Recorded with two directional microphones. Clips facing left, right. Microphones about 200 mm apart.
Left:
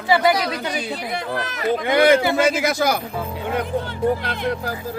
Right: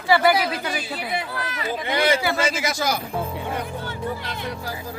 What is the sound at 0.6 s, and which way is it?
Speech, 25° left (ahead or behind).